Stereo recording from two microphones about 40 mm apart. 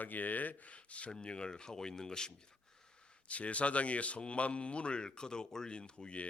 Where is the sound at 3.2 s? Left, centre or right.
Left.